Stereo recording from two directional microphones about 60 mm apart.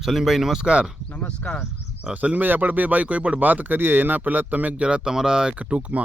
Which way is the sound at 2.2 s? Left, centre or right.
Right.